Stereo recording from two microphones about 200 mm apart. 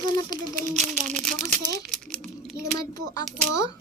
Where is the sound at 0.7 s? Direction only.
35° right (ahead or behind).